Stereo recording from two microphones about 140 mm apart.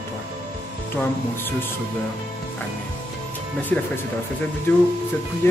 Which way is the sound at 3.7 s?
10° left (ahead or behind).